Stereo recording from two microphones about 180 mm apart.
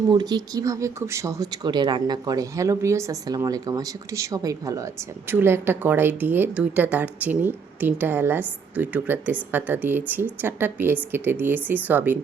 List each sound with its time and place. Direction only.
0.1 s speech: 25° right (ahead or behind)